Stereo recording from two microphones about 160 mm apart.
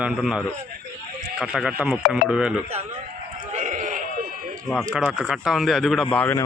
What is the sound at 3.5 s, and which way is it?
Sheep, 50° right (ahead or behind).